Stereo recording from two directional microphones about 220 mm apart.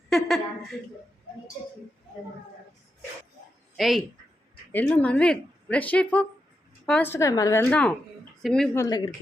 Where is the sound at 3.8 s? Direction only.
Centre (ahead or behind).